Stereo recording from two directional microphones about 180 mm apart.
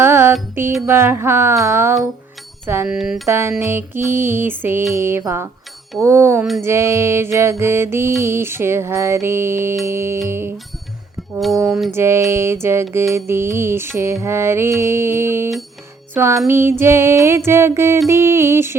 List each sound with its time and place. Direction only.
0.0 s music: 15° right (ahead or behind)
2.6 s speech: 10° right (ahead or behind)
3.2 s music: 15° right (ahead or behind)
11.9 s music: 15° right (ahead or behind)